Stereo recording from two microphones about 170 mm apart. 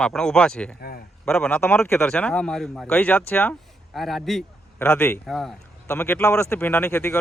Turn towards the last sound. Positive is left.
turn(degrees=15)  # may be behind; listen again after turning